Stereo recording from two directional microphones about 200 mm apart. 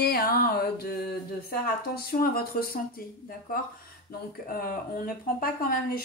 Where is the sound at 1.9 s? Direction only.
50° left (ahead or behind).